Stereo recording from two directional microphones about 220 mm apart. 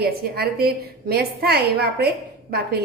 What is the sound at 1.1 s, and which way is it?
A woman's voice, 45° right (ahead or behind).